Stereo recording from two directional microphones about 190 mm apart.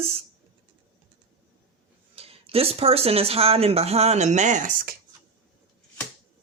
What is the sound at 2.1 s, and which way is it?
Speech, 30° right (ahead or behind).